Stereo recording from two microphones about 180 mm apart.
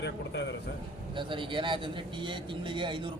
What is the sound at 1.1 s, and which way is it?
A man's voice, 25° right (ahead or behind).